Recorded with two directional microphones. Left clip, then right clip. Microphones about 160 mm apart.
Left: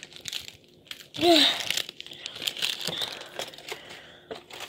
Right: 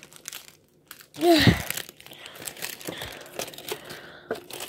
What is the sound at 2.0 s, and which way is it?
Crumpling, 20° right (ahead or behind).